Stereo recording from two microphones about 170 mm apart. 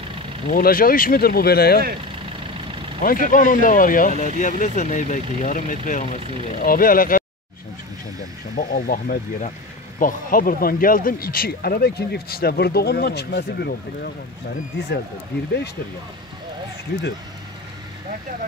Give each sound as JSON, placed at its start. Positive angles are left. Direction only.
{"t": 0.5, "sound": "speech", "side_deg": 55}
{"t": 3.0, "sound": "speech", "side_deg": 50}
{"t": 8.5, "sound": "speech", "side_deg": 55}